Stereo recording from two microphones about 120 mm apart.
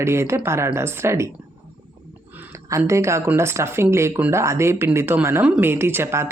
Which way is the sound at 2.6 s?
25° right (ahead or behind).